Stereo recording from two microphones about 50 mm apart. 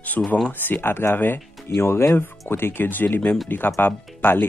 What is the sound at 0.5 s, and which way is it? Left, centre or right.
Speech, left.